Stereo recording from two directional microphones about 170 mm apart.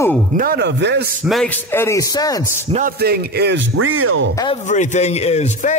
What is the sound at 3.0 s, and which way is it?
Speech, 70° right (ahead or behind).